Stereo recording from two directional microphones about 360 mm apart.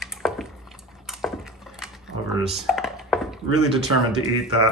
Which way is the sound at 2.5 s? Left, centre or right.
Centre.